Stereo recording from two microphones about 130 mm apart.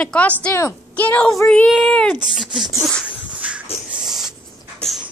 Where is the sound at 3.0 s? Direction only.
10° right (ahead or behind).